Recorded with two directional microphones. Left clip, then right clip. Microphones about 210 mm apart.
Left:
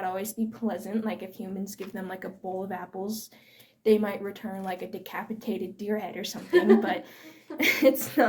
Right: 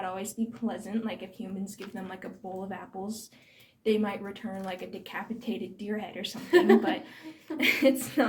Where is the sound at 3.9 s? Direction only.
45° left (ahead or behind).